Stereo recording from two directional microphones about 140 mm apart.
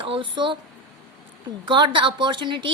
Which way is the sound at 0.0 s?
35° right (ahead or behind).